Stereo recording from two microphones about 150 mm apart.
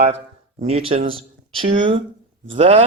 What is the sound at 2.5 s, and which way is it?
Speech, 45° right (ahead or behind).